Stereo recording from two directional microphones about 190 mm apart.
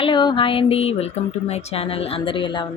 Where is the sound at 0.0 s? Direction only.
25° left (ahead or behind).